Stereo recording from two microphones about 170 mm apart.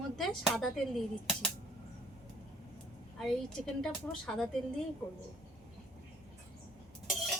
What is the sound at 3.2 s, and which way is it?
A woman's voice, 5° left (ahead or behind).